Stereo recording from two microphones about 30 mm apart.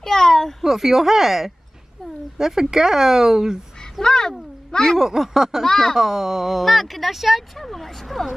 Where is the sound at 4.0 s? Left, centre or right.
Left.